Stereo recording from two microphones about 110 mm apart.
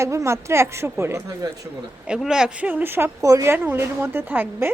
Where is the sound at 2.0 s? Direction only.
5° right (ahead or behind).